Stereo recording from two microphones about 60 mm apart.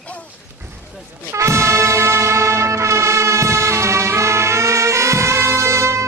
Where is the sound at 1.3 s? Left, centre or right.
Right.